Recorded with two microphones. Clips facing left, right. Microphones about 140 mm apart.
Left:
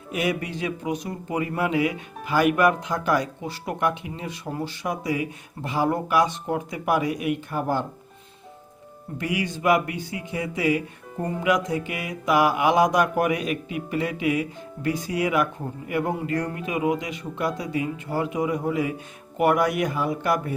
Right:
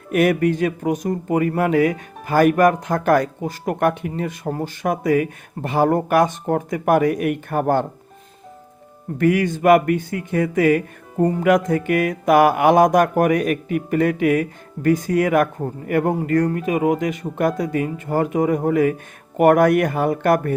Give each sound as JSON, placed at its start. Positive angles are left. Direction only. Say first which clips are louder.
{"t": 0.1, "sound": "speech", "louder": "right 10 dB", "side_deg": -55}
{"t": 9.1, "sound": "speech", "louder": "right 10 dB", "side_deg": -50}